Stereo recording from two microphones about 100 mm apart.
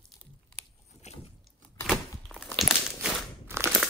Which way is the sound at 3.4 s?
25° right (ahead or behind).